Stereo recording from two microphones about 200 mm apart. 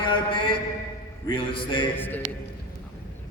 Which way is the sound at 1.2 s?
25° left (ahead or behind).